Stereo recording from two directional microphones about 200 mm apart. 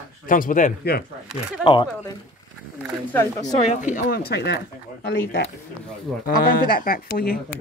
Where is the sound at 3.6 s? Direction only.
35° left (ahead or behind); by 4.5 s 55° left (ahead or behind).